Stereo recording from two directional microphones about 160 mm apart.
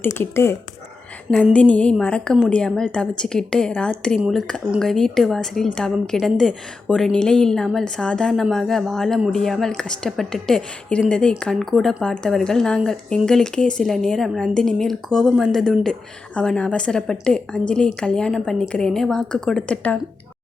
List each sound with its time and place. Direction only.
0.0 s speech: 15° left (ahead or behind)
1.5 s speech: 5° left (ahead or behind)